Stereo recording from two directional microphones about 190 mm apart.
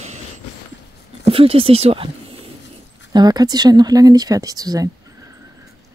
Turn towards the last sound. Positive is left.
turn(degrees=-20)  # may be behind; listen again after turning